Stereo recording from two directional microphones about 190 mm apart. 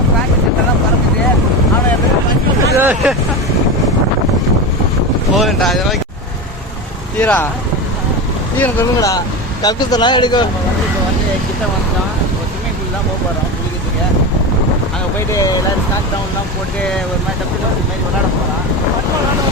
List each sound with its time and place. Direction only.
2.7 s hubbub: 5° right (ahead or behind)
5.3 s boat: centre (ahead or behind)
7.2 s speech: 10° left (ahead or behind)
8.5 s speech: 15° left (ahead or behind)
15.3 s speech: 20° left (ahead or behind)